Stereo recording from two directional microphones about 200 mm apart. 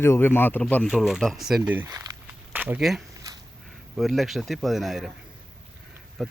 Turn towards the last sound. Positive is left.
turn(degrees=0)  # may be behind; listen again after turning